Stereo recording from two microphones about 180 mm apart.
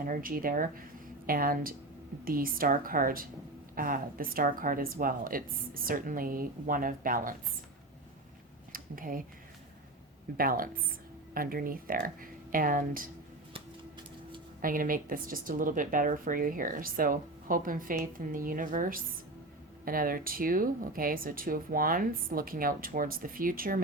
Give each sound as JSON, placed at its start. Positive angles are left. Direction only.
{"t": 0.0, "sound": "speech", "side_deg": -50}
{"t": 8.7, "sound": "speech", "side_deg": -50}
{"t": 10.3, "sound": "speech", "side_deg": -55}
{"t": 14.6, "sound": "speech", "side_deg": -50}